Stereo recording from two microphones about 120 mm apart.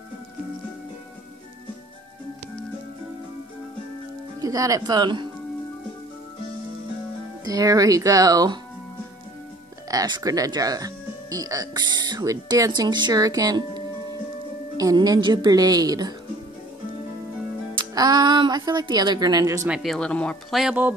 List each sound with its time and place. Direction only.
4.4 s speech: 30° right (ahead or behind)
7.4 s speech: 30° right (ahead or behind)
9.8 s speech: 35° right (ahead or behind)
17.7 s speech: 35° right (ahead or behind)
19.7 s speech: centre (ahead or behind)